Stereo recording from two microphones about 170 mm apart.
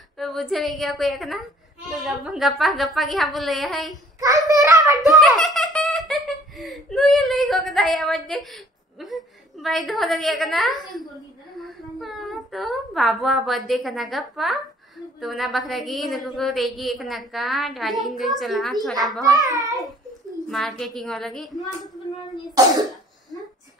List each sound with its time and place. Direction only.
0.2 s a woman's voice: centre (ahead or behind)
4.2 s child singing: 20° right (ahead or behind)
5.2 s giggle: centre (ahead or behind)
9.0 s a woman's voice: centre (ahead or behind)
11.5 s a sound: centre (ahead or behind)
15.1 s a woman's voice: centre (ahead or behind)
19.4 s a child's voice: 20° right (ahead or behind)
20.4 s a woman's voice: centre (ahead or behind)
22.6 s a child's voice: 20° right (ahead or behind)